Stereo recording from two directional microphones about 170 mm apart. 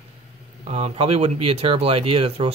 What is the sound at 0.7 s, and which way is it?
Speech, 35° right (ahead or behind).